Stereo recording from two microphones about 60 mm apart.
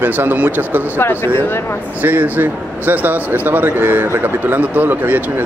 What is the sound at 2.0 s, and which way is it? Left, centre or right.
Speech, right.